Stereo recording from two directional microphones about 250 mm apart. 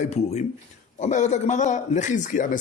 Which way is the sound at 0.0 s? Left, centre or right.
Left.